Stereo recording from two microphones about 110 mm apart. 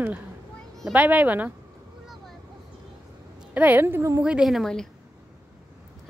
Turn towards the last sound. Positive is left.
turn(degrees=5)  # may be behind; listen again after turning